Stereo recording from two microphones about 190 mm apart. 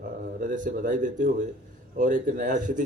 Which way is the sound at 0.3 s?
45° right (ahead or behind).